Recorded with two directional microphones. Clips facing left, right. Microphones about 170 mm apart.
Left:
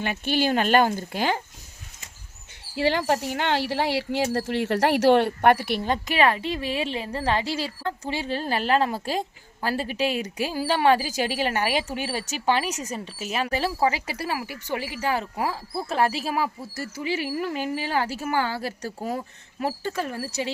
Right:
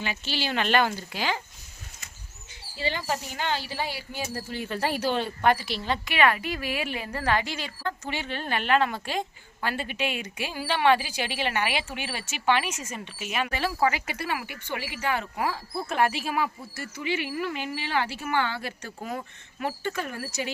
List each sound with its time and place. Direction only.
0.0 s speech: 55° left (ahead or behind)
2.7 s speech: 75° left (ahead or behind); by 6.1 s 45° left (ahead or behind)
6.1 s a woman's voice: 30° left (ahead or behind)